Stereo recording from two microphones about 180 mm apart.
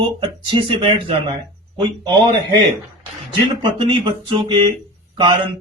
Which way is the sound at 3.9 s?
25° right (ahead or behind).